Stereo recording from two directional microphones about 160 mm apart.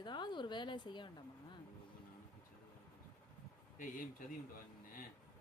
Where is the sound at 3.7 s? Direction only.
55° left (ahead or behind).